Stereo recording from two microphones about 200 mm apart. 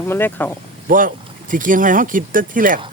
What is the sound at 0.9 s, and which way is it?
Speech, 45° right (ahead or behind).